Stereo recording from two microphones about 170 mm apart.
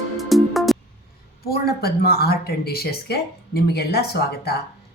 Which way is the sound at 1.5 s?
65° left (ahead or behind).